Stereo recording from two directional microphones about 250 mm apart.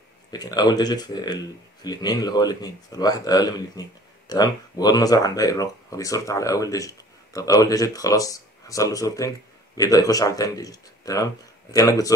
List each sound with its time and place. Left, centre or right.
0.3 s speech: centre